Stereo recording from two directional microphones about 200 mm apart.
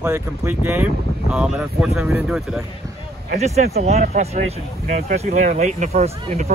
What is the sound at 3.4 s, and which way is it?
Speech, 35° right (ahead or behind).